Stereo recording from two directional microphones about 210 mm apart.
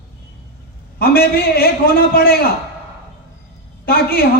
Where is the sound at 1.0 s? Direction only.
45° left (ahead or behind).